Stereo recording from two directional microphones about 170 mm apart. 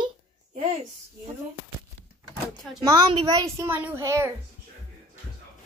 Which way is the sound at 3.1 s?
30° right (ahead or behind).